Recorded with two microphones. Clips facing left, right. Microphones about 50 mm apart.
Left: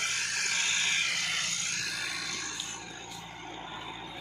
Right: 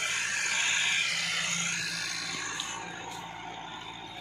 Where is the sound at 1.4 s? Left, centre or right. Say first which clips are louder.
Right 3 dB; right.